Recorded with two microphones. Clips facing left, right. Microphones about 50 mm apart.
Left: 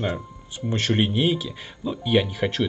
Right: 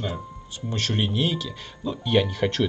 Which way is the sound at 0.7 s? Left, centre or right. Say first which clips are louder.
Left 4 dB; left.